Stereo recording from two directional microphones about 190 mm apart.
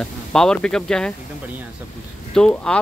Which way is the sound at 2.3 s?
5° left (ahead or behind).